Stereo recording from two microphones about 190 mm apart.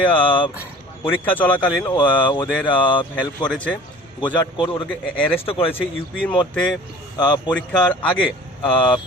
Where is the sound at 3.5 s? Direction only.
5° left (ahead or behind).